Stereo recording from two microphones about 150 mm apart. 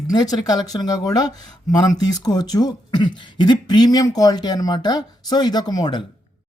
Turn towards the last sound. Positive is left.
turn(degrees=25)  # may be behind; listen again after turning